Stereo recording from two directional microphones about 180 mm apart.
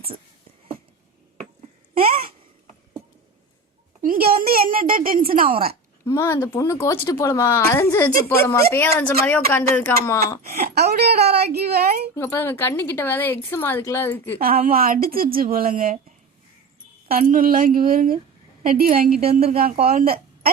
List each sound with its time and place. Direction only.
2.0 s babbling: 55° right (ahead or behind)
4.0 s a sound: 50° right (ahead or behind)
5.3 s a woman's voice: 50° right (ahead or behind)
6.1 s a woman's voice: 15° left (ahead or behind)
10.5 s a woman's voice: 60° right (ahead or behind)
12.1 s a woman's voice: 15° left (ahead or behind)
14.3 s a woman's voice: 55° right (ahead or behind)
17.1 s a woman's voice: 50° right (ahead or behind)
19.2 s speech: 35° right (ahead or behind)
19.8 s speech: 55° right (ahead or behind)